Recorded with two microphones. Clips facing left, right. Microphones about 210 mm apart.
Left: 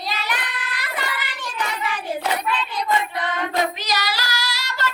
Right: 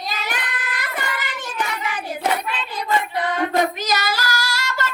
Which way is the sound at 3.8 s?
50° right (ahead or behind).